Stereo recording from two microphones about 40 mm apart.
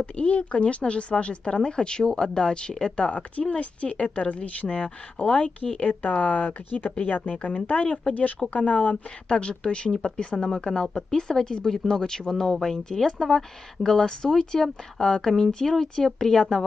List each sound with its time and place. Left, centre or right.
0.0 s a woman's voice: left
8.1 s speech: left
9.3 s a woman's voice: left